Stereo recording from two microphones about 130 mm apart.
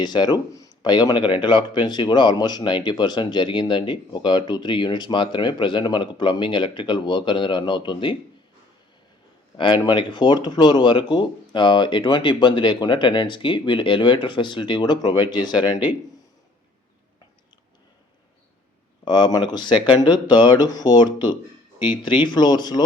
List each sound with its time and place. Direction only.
0.0 s speech: 35° left (ahead or behind)
9.6 s speech: 40° left (ahead or behind)
19.0 s speech: 35° left (ahead or behind)